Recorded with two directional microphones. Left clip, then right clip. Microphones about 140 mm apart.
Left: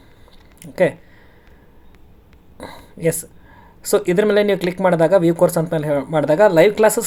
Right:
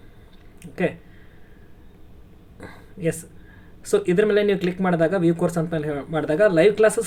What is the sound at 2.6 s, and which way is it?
Speech, 25° left (ahead or behind).